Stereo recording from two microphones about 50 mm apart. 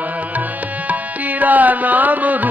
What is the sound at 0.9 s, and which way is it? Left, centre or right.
Music, right.